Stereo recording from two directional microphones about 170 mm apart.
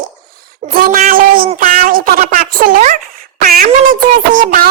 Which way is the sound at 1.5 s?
55° right (ahead or behind).